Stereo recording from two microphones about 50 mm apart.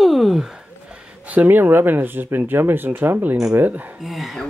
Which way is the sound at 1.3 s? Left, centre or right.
Right.